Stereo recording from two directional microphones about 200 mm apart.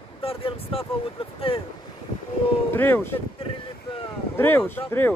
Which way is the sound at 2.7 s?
10° left (ahead or behind).